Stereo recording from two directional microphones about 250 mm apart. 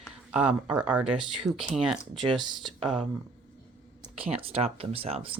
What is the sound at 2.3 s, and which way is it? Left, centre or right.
Speech, centre.